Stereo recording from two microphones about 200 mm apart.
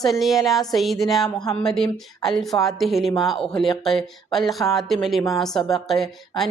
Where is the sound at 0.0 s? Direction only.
Centre (ahead or behind).